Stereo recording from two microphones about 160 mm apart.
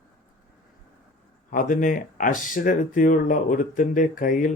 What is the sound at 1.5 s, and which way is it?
Speech, 55° left (ahead or behind).